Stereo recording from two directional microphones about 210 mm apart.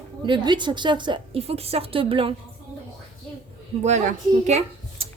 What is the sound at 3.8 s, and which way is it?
Speech, 35° right (ahead or behind).